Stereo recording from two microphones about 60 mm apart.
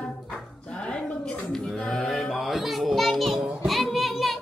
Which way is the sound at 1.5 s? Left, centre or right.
Centre.